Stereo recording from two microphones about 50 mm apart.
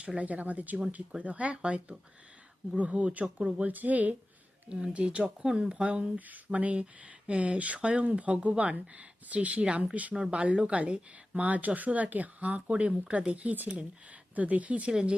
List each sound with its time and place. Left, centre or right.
0.0 s speech: right
4.7 s speech: centre
10.2 s speech: centre
10.4 s speech: right